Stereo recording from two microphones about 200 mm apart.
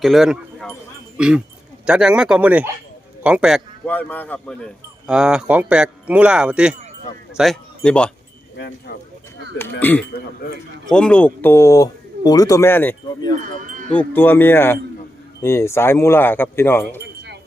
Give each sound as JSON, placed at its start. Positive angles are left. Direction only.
{"t": 0.0, "sound": "speech", "side_deg": 0}
{"t": 1.9, "sound": "speech", "side_deg": -5}
{"t": 3.8, "sound": "speech", "side_deg": 10}
{"t": 8.5, "sound": "speech", "side_deg": 55}
{"t": 10.0, "sound": "a man's voice", "side_deg": 50}
{"t": 10.8, "sound": "speech", "side_deg": 5}
{"t": 13.6, "sound": "wind chime", "side_deg": -40}
{"t": 13.9, "sound": "speech", "side_deg": 10}